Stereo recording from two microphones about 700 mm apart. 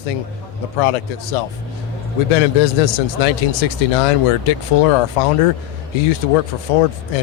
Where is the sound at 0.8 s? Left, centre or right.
Left.